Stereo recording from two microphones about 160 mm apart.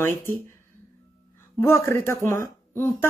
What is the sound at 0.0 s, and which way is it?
Speech, 15° left (ahead or behind).